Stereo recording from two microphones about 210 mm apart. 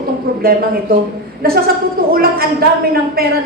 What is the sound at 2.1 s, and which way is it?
A woman's voice, 45° right (ahead or behind).